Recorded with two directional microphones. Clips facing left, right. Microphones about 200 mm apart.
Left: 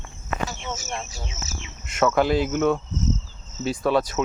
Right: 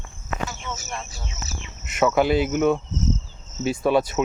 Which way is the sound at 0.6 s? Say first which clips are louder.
Left 1 dB; 30° left (ahead or behind).